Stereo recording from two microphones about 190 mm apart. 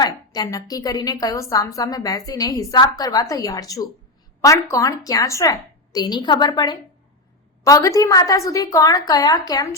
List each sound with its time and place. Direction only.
0.0 s a woman's voice: 20° left (ahead or behind)